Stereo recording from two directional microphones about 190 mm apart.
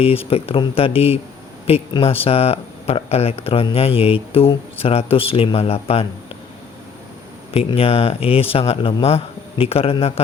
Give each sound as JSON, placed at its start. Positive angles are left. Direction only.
{"t": 0.0, "sound": "speech", "side_deg": 30}
{"t": 7.5, "sound": "speech", "side_deg": 30}